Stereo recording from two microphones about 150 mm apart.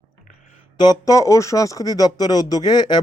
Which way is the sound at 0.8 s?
25° left (ahead or behind).